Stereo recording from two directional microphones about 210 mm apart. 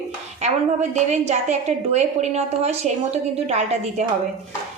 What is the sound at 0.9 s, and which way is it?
A woman's voice, 35° right (ahead or behind).